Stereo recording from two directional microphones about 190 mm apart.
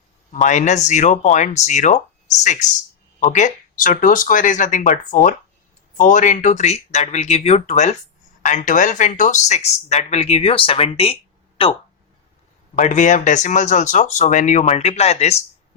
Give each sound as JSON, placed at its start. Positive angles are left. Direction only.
{"t": 0.3, "sound": "speech", "side_deg": 40}
{"t": 12.7, "sound": "speech", "side_deg": 40}